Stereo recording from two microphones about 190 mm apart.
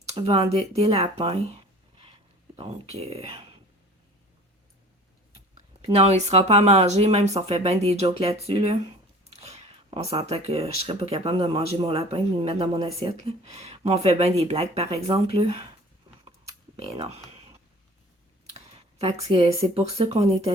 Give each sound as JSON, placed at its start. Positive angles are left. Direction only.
{"t": 0.2, "sound": "speech", "side_deg": -30}
{"t": 2.6, "sound": "speech", "side_deg": -35}
{"t": 5.8, "sound": "speech", "side_deg": -35}
{"t": 9.3, "sound": "a sound", "side_deg": -35}
{"t": 10.8, "sound": "speech", "side_deg": -30}
{"t": 16.7, "sound": "speech", "side_deg": -35}
{"t": 19.3, "sound": "speech", "side_deg": -30}